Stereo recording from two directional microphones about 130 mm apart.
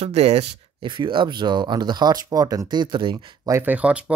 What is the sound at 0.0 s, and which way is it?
Speech, 55° right (ahead or behind).